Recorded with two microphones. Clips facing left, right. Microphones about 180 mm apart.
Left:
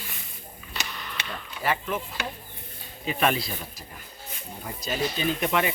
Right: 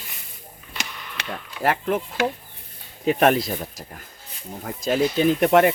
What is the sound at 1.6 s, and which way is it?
Speech, 65° right (ahead or behind).